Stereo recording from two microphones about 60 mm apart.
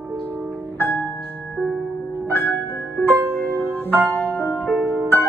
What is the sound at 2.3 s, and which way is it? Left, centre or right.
Music, left.